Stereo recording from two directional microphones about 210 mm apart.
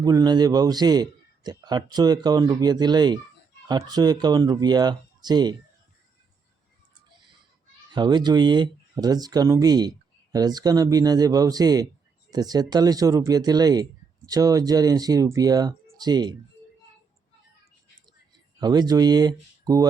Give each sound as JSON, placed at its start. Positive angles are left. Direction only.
{"t": 0.0, "sound": "speech", "side_deg": -20}
{"t": 7.9, "sound": "speech", "side_deg": -20}
{"t": 18.6, "sound": "speech", "side_deg": -20}